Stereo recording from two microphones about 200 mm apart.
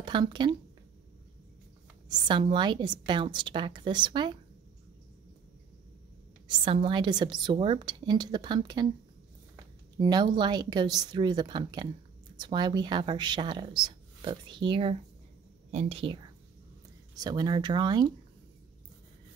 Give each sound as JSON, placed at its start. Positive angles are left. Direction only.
{"t": 0.0, "sound": "speech", "side_deg": -25}
{"t": 2.0, "sound": "speech", "side_deg": -25}
{"t": 6.4, "sound": "speech", "side_deg": -25}
{"t": 9.9, "sound": "speech", "side_deg": -20}